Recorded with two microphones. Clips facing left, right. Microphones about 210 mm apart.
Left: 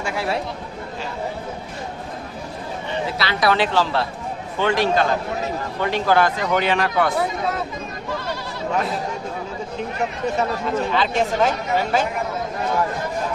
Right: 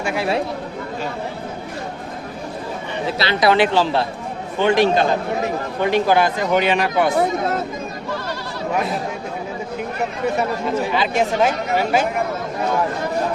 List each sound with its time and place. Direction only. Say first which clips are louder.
0.0 s chatter: right 3 dB; 20° right (ahead or behind)
3.2 s speech: right 5 dB; 25° right (ahead or behind)
10.9 s speech: right 1 dB; 10° right (ahead or behind)